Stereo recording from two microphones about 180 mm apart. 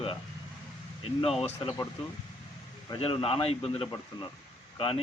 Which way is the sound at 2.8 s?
30° left (ahead or behind).